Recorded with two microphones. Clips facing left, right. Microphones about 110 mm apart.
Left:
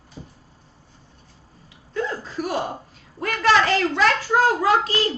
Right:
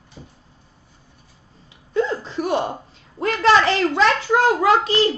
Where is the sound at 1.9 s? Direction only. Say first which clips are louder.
Right 5 dB; 25° right (ahead or behind).